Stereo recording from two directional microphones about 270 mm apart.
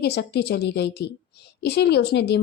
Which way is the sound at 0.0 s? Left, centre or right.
Left.